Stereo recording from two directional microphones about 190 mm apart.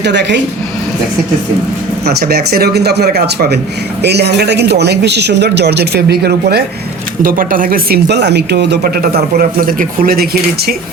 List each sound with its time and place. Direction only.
0.0 s speech: 65° right (ahead or behind)
2.0 s a man's voice: 55° right (ahead or behind)
9.4 s speech: 50° right (ahead or behind)